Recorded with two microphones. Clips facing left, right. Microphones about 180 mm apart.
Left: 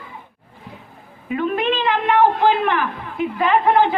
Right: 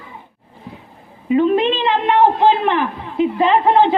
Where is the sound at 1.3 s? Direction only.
25° right (ahead or behind).